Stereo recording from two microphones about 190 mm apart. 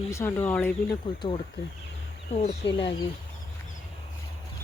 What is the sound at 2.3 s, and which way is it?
Speech, 30° left (ahead or behind).